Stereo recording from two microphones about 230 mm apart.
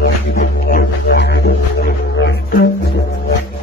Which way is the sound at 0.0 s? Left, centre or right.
Left.